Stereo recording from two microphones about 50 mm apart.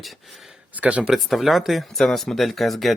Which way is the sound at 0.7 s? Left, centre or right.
Right.